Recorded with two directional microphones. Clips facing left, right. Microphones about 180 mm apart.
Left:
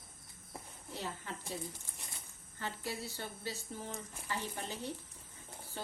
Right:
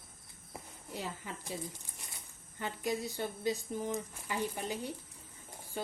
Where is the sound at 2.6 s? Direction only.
15° right (ahead or behind).